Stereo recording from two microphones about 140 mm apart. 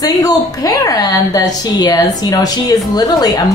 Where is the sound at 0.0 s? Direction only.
25° left (ahead or behind).